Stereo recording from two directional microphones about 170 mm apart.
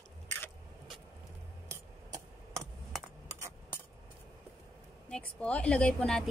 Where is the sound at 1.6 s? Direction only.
20° right (ahead or behind).